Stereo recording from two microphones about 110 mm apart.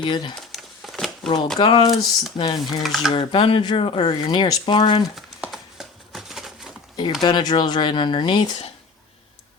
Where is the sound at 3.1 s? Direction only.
50° left (ahead or behind).